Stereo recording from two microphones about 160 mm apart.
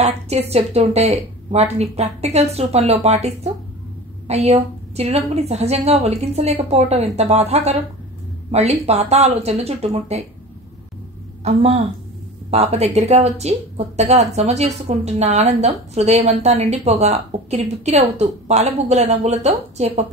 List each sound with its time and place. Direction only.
0.0 s a woman's voice: 40° right (ahead or behind)
4.3 s a woman's voice: 40° right (ahead or behind)
11.4 s a woman's voice: 40° right (ahead or behind)